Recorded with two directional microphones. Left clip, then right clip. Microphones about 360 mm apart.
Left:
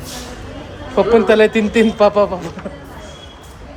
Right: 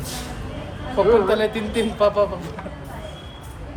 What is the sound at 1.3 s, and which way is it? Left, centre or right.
A man's voice, left.